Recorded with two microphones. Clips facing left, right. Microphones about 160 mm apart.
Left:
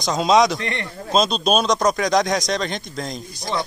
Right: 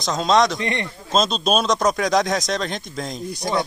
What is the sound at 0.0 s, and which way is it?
Speech, centre (ahead or behind).